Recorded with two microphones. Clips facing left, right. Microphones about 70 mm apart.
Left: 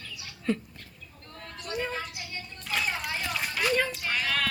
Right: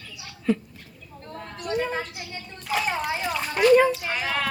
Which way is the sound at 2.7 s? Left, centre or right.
Centre.